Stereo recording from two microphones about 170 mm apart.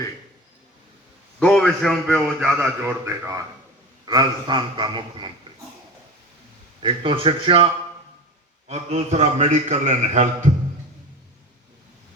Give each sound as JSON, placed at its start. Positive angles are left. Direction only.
{"t": 1.4, "sound": "a man's voice", "side_deg": 5}
{"t": 2.4, "sound": "a man's voice", "side_deg": -10}
{"t": 6.8, "sound": "a man's voice", "side_deg": -30}